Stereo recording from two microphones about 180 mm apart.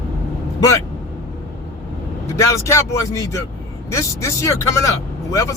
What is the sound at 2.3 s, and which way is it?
Speech, 15° left (ahead or behind).